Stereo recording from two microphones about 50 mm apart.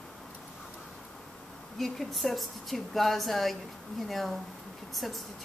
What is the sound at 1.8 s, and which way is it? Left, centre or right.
Speech, centre.